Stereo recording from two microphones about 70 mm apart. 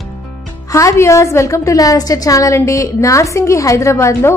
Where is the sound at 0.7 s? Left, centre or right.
Left.